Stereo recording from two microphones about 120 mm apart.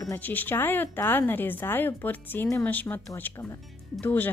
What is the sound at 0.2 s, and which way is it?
Speech, 15° left (ahead or behind).